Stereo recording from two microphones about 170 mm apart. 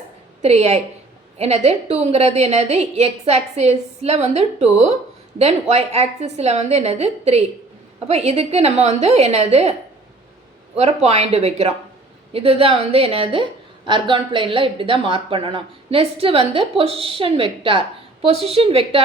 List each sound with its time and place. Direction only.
0.4 s speech: 40° right (ahead or behind)
10.8 s speech: 40° right (ahead or behind)